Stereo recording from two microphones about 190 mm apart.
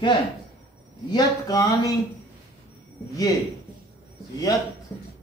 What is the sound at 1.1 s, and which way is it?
Speech, 20° left (ahead or behind).